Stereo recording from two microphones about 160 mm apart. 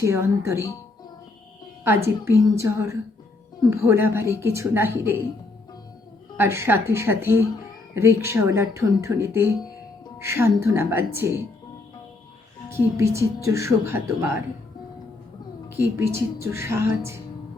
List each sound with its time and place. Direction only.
0.0 s speech: 15° right (ahead or behind)
1.9 s speech: 15° right (ahead or behind)
6.3 s speech: 15° right (ahead or behind)
12.7 s speech: 20° right (ahead or behind)
15.7 s speech: 15° right (ahead or behind)